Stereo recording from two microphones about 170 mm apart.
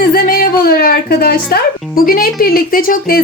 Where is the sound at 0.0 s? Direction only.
60° left (ahead or behind).